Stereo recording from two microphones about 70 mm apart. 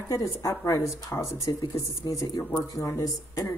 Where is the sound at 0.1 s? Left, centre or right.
Left.